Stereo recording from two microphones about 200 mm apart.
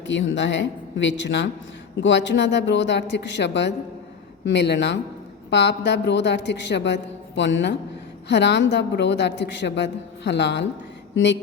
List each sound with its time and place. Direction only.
0.0 s a woman's voice: 65° left (ahead or behind)